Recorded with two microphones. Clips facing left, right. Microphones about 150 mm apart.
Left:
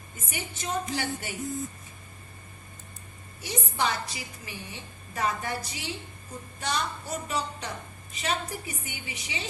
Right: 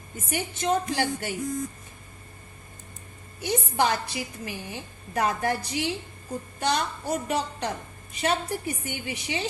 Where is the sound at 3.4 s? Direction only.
60° right (ahead or behind).